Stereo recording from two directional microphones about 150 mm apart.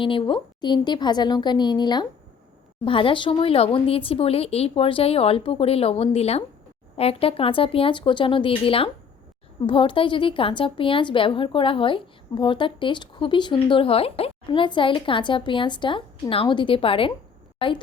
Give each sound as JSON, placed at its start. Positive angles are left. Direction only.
{"t": 0.0, "sound": "a woman's voice", "side_deg": 35}